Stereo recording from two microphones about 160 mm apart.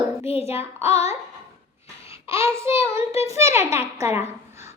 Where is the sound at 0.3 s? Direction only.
40° left (ahead or behind).